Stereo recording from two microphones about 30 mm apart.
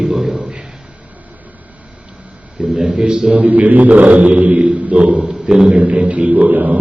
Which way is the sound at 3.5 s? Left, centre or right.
Right.